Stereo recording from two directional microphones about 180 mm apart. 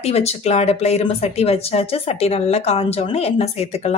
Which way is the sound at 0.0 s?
35° left (ahead or behind).